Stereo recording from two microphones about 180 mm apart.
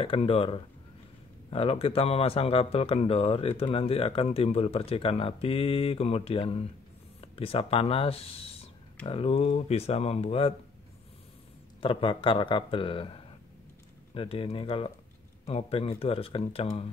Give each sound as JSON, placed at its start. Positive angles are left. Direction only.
{"t": 0.0, "sound": "speech", "side_deg": 30}
{"t": 11.8, "sound": "speech", "side_deg": 30}